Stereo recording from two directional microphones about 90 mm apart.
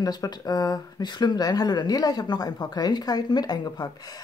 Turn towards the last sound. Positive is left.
turn(degrees=45)  # may be behind; listen again after turning